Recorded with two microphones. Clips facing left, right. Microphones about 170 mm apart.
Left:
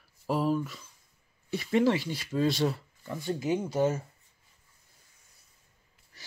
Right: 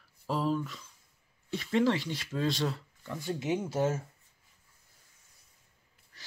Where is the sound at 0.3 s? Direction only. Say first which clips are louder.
Left 3 dB; 10° left (ahead or behind).